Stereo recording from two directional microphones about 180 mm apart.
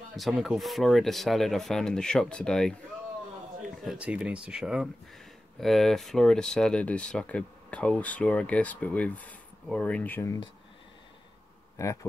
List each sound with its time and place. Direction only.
0.1 s speech: centre (ahead or behind)
3.8 s speech: 5° right (ahead or behind)
11.7 s speech: 15° left (ahead or behind)